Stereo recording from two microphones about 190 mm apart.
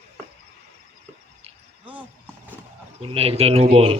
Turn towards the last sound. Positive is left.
turn(degrees=-30)  # may be behind; listen again after turning